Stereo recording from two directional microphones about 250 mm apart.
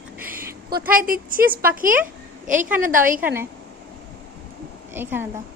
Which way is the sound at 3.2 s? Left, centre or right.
Centre.